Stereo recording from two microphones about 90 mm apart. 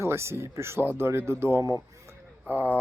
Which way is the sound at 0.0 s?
30° right (ahead or behind).